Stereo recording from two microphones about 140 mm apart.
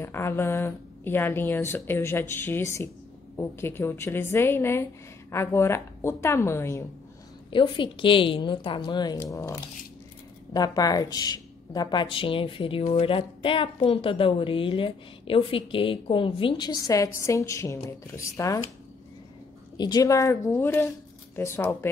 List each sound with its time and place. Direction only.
0.0 s a woman's voice: 15° left (ahead or behind)
7.5 s a woman's voice: 35° left (ahead or behind)
19.8 s a woman's voice: 25° left (ahead or behind)